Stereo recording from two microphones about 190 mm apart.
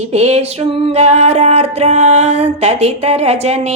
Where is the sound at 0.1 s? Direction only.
35° right (ahead or behind).